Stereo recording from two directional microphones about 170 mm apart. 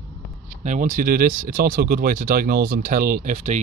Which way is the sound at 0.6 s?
50° right (ahead or behind).